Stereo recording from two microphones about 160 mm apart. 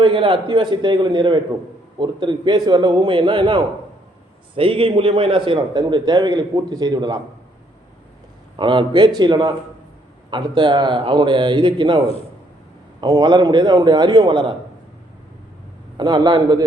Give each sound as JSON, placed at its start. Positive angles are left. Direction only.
{"t": 0.0, "sound": "a man's voice", "side_deg": -30}
{"t": 8.5, "sound": "a man's voice", "side_deg": -30}
{"t": 16.0, "sound": "a man's voice", "side_deg": -25}